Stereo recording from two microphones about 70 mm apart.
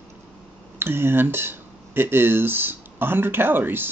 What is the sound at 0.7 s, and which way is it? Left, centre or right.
Speech, right.